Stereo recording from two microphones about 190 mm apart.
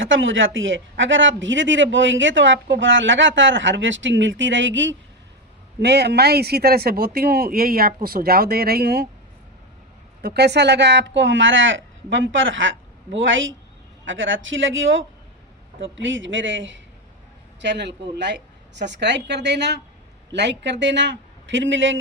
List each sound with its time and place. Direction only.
0.0 s speech: 90° right; by 4.9 s 70° right (ahead or behind)
5.8 s speech: 60° right (ahead or behind)
10.2 s a man's voice: 60° right (ahead or behind); by 16.8 s 80° right
17.6 s speech: 65° right (ahead or behind)